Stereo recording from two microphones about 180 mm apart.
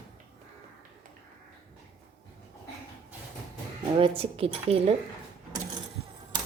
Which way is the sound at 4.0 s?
30° right (ahead or behind).